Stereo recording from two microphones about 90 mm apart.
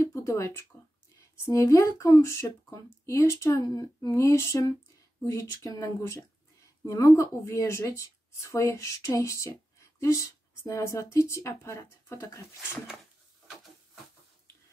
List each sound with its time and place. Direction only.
0.0 s a sound: 30° left (ahead or behind)
1.4 s speech: 35° left (ahead or behind)
4.1 s speech: 30° left (ahead or behind)